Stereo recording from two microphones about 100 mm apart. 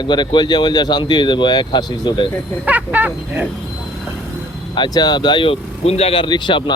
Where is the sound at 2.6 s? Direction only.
15° right (ahead or behind).